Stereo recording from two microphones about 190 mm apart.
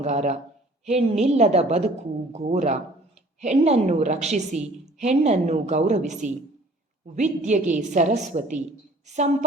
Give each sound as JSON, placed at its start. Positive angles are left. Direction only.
{"t": 0.0, "sound": "a woman's voice", "side_deg": -35}